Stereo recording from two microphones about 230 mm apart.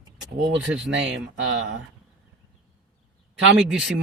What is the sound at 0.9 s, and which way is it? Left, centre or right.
Speech, right.